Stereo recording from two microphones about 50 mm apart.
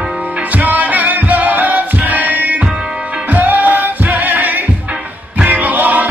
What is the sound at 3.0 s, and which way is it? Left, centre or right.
Music, right.